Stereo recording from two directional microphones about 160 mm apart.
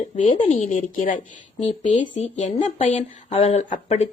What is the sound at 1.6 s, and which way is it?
Speech, 40° left (ahead or behind).